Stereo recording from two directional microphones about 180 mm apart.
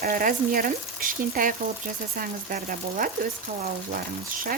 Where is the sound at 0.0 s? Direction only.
50° right (ahead or behind).